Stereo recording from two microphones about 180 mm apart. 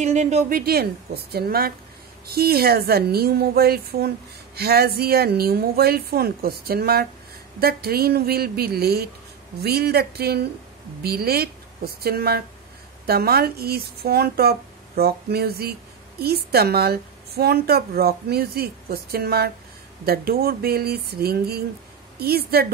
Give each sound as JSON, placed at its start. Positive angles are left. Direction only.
{"t": 0.0, "sound": "a woman's voice", "side_deg": -40}